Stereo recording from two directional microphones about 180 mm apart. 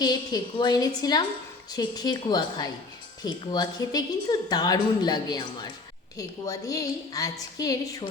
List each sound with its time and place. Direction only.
0.0 s a woman's voice: 25° left (ahead or behind)